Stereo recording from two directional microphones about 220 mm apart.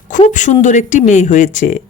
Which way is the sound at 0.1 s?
35° left (ahead or behind).